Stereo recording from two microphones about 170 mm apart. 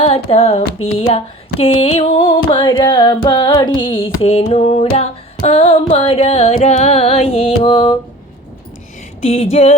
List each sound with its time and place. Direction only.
0.0 s music: 35° left (ahead or behind)
0.9 s a sound: 35° left (ahead or behind)
3.8 s music: 30° left (ahead or behind)
9.2 s music: 40° left (ahead or behind)